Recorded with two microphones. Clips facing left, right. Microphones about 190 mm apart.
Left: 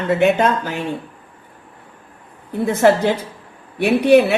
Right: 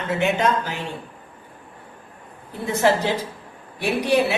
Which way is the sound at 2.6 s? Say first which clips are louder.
Left 5 dB; 55° left (ahead or behind).